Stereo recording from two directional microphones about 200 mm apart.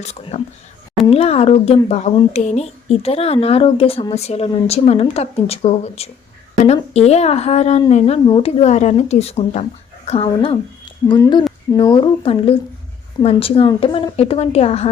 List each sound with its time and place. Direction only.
0.0 s a woman's voice: 35° left (ahead or behind)